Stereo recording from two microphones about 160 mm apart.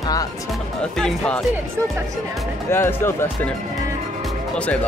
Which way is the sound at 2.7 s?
15° left (ahead or behind).